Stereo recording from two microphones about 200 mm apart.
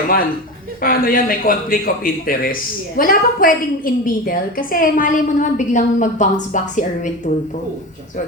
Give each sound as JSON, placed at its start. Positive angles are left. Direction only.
{"t": 0.8, "sound": "a man's voice", "side_deg": 45}